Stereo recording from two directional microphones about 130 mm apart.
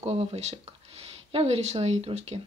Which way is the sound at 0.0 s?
50° right (ahead or behind).